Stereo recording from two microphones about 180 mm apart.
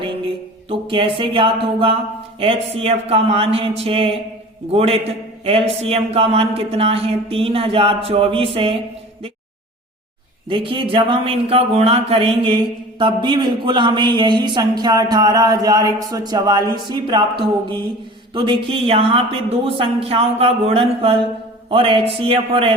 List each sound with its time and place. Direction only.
0.7 s a man's voice: 30° right (ahead or behind)
10.5 s a man's voice: 30° right (ahead or behind)
18.3 s a man's voice: 30° right (ahead or behind)